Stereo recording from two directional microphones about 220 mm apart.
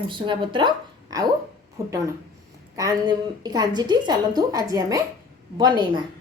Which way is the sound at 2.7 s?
15° right (ahead or behind).